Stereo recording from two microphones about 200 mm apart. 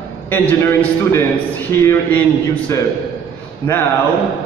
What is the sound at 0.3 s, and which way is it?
A man's voice, 10° left (ahead or behind).